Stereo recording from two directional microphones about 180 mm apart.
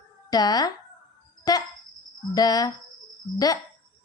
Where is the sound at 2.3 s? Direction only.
20° left (ahead or behind).